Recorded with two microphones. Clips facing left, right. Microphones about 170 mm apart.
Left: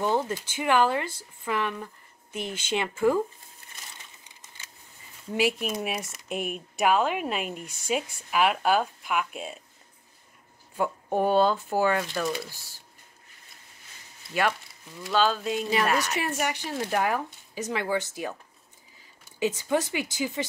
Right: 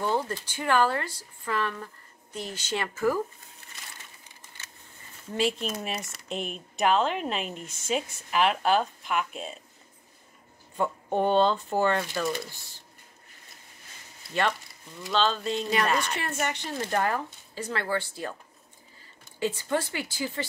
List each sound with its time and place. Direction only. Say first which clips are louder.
0.0 s speech: left 2 dB; 15° left (ahead or behind)
5.3 s speech: left 2 dB; 10° left (ahead or behind)
10.8 s speech: left 1 dB; 5° left (ahead or behind)
15.0 s speech: left 2 dB; 5° left (ahead or behind)